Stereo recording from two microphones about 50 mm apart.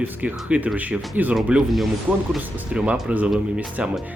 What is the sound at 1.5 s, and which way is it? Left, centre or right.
Speech, right.